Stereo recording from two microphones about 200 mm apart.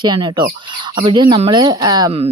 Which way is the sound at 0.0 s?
20° right (ahead or behind).